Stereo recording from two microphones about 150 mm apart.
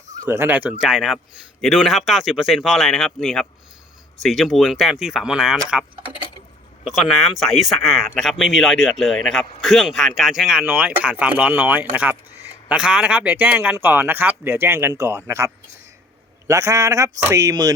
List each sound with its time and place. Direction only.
0.3 s speech: 15° right (ahead or behind)